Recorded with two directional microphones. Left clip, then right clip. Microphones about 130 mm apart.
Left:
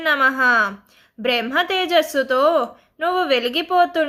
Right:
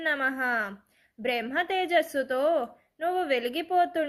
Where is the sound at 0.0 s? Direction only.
20° right (ahead or behind).